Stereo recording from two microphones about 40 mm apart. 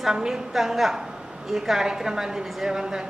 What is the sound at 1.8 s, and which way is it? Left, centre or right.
A man's voice, centre.